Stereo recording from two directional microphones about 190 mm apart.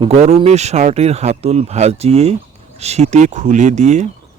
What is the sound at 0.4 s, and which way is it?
Speech, 35° right (ahead or behind).